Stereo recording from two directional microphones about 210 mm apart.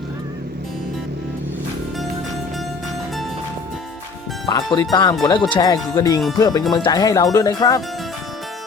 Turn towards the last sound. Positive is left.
turn(degrees=15)  # may be behind; listen again after turning